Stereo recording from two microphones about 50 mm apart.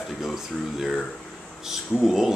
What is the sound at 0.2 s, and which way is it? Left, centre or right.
Speech, centre.